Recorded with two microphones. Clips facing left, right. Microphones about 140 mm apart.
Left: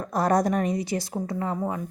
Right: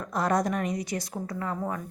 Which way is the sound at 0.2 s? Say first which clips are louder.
Left 4 dB; 35° left (ahead or behind).